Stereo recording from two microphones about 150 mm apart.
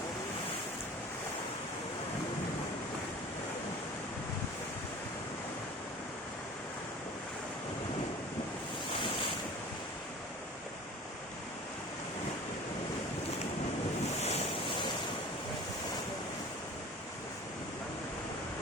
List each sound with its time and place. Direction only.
14.2 s waves: 45° left (ahead or behind)